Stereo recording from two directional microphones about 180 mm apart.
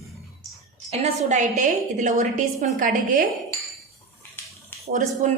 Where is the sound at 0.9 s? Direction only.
40° right (ahead or behind).